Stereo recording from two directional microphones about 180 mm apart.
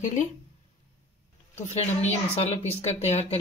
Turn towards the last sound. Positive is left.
turn(degrees=35)  # may be behind; listen again after turning